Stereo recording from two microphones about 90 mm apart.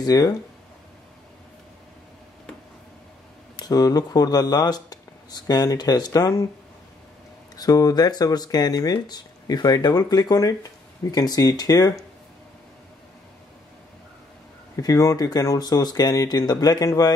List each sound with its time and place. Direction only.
0.0 s speech: 45° left (ahead or behind)
3.5 s speech: 45° left (ahead or behind)
7.5 s speech: 45° left (ahead or behind)
14.8 s speech: 40° left (ahead or behind)